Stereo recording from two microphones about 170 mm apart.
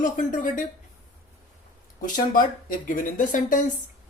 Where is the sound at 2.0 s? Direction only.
55° left (ahead or behind).